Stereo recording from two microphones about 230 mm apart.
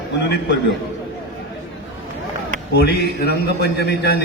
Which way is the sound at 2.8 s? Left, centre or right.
Left.